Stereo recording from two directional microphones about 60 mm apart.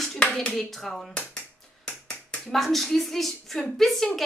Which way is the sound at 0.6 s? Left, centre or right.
Centre.